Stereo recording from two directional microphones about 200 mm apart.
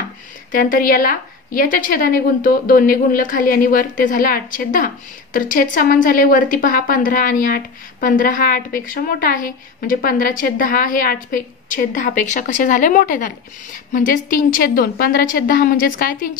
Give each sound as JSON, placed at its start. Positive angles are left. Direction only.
{"t": 0.5, "sound": "a woman's voice", "side_deg": 45}